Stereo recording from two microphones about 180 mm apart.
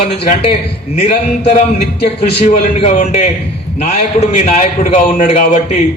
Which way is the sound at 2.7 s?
35° left (ahead or behind).